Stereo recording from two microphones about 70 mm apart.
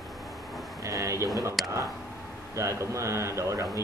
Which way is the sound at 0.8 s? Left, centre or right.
Right.